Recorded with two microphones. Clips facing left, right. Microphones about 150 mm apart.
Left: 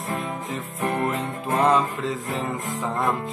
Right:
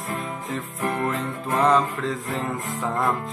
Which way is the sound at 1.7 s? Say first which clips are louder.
Right 1 dB; centre (ahead or behind).